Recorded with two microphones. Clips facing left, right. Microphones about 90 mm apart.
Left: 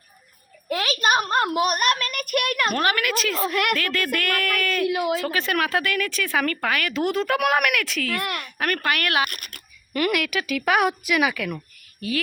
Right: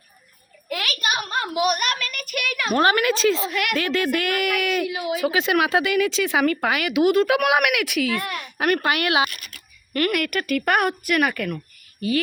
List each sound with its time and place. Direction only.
0.7 s a sound: 30° left (ahead or behind)
1.0 s a woman's voice: 45° left (ahead or behind)
2.7 s speech: 25° right (ahead or behind)
3.4 s speech: 45° left (ahead or behind)
3.8 s speech: 20° right (ahead or behind)
4.9 s speech: 60° left (ahead or behind)
5.2 s speech: 15° right (ahead or behind)
7.0 s a woman's voice: 5° right (ahead or behind)
8.1 s a woman's voice: 70° left (ahead or behind)
8.5 s speech: 20° right (ahead or behind)
9.3 s a sound: 55° left (ahead or behind)
9.9 s a woman's voice: 5° left (ahead or behind)